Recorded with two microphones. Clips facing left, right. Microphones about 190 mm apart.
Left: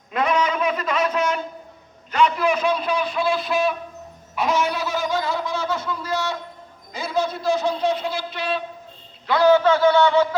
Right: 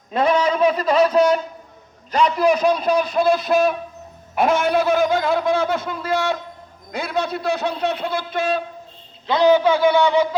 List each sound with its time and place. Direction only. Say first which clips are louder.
0.1 s a sound: right 3 dB; 30° right (ahead or behind)
2.1 s a man's voice: right 3 dB; 40° right (ahead or behind)
9.2 s a man's voice: right 1 dB; 20° right (ahead or behind)